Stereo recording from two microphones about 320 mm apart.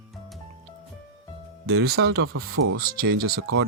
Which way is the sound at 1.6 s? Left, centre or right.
Right.